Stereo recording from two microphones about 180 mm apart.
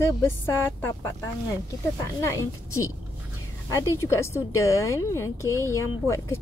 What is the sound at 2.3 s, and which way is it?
Speech, 15° left (ahead or behind).